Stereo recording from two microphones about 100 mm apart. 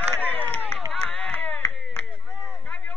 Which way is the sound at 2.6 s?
15° left (ahead or behind).